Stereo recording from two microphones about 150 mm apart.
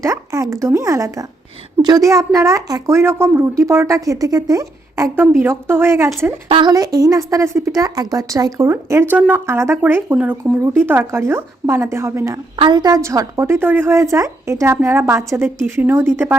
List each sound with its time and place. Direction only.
0.0 s speech: 20° right (ahead or behind)
6.5 s speech: 30° right (ahead or behind)
12.5 s speech: 30° right (ahead or behind); by 16.3 s 15° right (ahead or behind)